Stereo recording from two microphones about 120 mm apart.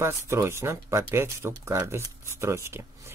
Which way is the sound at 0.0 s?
25° right (ahead or behind).